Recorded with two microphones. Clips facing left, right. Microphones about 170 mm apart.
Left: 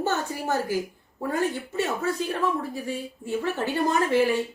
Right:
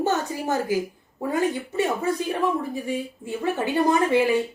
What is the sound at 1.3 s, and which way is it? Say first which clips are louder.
Speech: right 3 dB; 15° right (ahead or behind).